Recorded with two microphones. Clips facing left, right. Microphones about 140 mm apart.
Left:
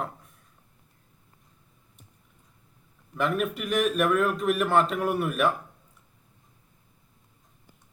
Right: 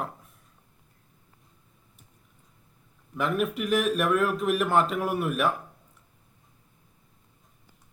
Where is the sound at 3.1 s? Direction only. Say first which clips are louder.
Even; centre (ahead or behind).